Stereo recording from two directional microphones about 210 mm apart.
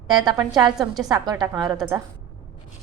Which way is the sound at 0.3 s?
20° right (ahead or behind).